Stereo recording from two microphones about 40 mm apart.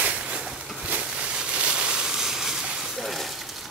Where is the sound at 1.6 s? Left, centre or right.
Right.